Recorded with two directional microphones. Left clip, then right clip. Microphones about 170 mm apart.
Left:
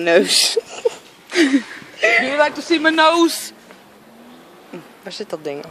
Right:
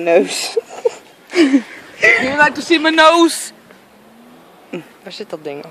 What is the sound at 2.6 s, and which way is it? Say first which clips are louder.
Speech: right 3 dB; 35° right (ahead or behind).